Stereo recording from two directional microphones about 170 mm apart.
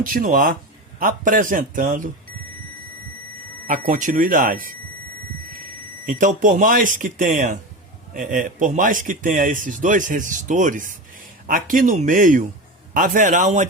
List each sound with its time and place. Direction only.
0.0 s speech: 55° right (ahead or behind)
3.7 s speech: 50° right (ahead or behind)
6.1 s speech: 50° right (ahead or behind)